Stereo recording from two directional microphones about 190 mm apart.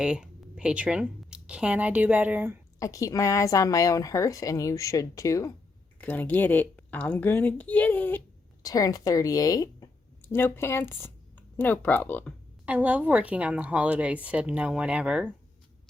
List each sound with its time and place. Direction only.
0.0 s speech: 5° right (ahead or behind)
2.7 s a woman's voice: 15° left (ahead or behind)
12.6 s speech: 10° right (ahead or behind)